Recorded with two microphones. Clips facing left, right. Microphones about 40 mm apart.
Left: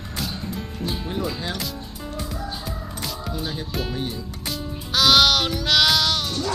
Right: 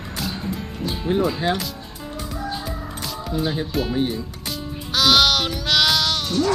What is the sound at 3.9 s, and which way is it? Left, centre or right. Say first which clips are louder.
Speech: right 6 dB; centre.